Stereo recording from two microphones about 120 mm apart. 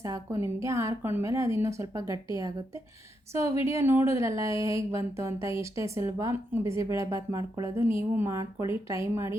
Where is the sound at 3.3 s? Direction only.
25° right (ahead or behind).